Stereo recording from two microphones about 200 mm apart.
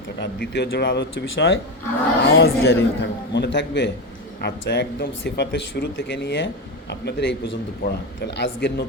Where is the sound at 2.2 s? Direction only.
55° left (ahead or behind).